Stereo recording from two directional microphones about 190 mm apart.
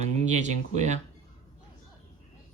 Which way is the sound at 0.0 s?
35° right (ahead or behind).